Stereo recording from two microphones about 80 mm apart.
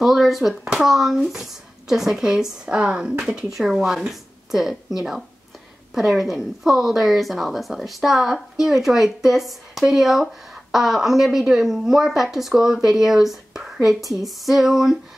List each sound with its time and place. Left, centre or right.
0.0 s a woman's voice: centre